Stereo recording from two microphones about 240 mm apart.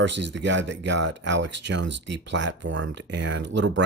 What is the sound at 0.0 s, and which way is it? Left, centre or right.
Speech, right.